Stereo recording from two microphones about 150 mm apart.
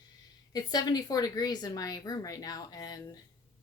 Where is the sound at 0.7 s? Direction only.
25° left (ahead or behind).